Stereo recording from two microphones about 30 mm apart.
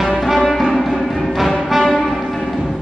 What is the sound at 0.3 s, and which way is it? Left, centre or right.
Music, centre.